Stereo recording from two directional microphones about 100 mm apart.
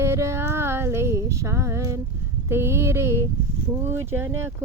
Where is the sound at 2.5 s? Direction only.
25° right (ahead or behind).